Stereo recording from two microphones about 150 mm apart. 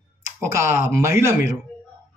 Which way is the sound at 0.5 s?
20° right (ahead or behind).